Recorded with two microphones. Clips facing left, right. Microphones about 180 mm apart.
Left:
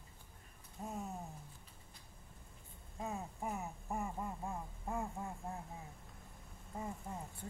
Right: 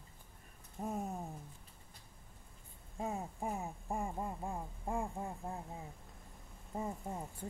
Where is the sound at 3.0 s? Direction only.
30° right (ahead or behind).